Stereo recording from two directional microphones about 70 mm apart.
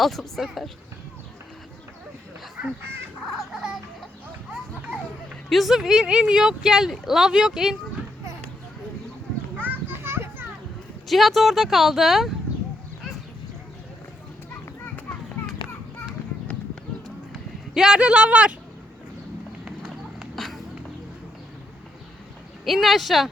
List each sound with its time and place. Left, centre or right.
0.0 s speech: centre
3.3 s speech: centre
5.5 s speech: centre
9.6 s children playing: right
11.1 s speech: centre
17.7 s speech: centre
20.3 s a sound: centre
22.6 s speech: centre